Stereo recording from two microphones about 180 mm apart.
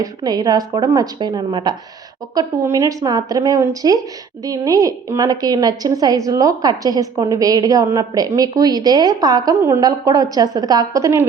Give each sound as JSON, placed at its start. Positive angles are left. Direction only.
{"t": 0.0, "sound": "a woman's voice", "side_deg": -20}